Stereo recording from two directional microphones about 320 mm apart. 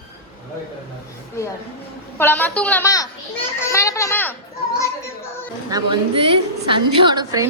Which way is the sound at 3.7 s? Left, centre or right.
Centre.